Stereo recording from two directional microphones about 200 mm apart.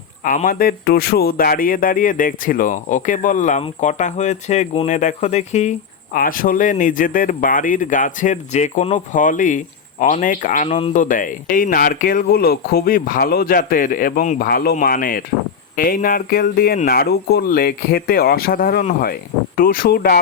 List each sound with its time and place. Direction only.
0.3 s speech: 40° left (ahead or behind)
10.7 s speech: 30° left (ahead or behind)
10.9 s speech: 40° left (ahead or behind)